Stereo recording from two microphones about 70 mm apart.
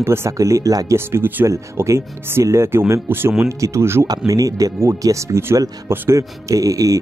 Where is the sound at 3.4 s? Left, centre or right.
Right.